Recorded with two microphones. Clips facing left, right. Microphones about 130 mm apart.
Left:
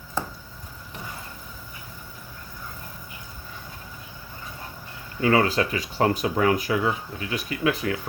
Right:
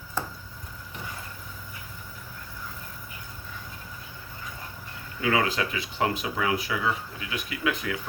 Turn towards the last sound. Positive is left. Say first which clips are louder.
# left 4 dB
turn(degrees=35)  # may be behind; listen again after turning